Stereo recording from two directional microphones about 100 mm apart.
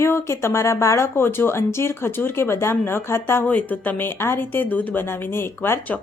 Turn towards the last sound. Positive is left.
turn(degrees=20)  # may be behind; listen again after turning